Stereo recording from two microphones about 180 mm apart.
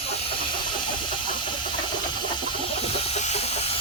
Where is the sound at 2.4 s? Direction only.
25° left (ahead or behind).